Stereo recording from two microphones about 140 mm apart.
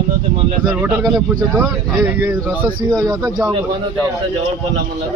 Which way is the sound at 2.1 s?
10° right (ahead or behind).